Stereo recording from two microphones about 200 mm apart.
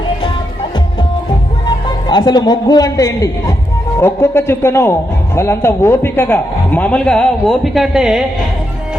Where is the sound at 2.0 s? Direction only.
20° left (ahead or behind); by 8.2 s centre (ahead or behind).